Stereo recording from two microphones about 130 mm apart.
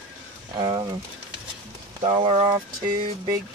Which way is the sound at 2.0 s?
40° right (ahead or behind).